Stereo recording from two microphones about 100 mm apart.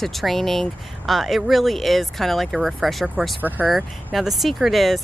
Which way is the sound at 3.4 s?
15° right (ahead or behind).